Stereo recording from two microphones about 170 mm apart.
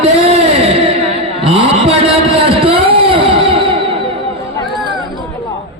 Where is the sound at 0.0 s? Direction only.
40° right (ahead or behind).